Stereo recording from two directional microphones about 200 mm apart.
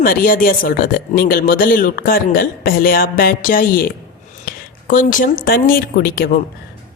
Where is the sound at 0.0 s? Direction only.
45° left (ahead or behind).